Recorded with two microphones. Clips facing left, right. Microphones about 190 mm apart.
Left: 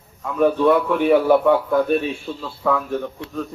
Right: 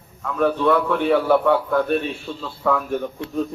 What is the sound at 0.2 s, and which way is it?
A man's voice, 15° left (ahead or behind).